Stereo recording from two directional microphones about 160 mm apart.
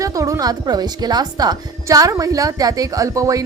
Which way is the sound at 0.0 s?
20° right (ahead or behind).